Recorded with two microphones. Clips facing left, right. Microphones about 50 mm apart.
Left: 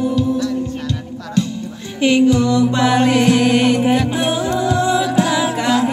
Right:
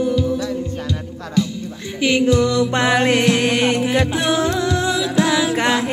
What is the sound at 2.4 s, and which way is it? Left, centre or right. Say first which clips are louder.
Mantra: left 2 dB; right.